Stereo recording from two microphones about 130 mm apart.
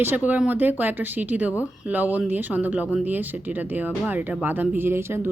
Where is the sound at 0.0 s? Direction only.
15° right (ahead or behind).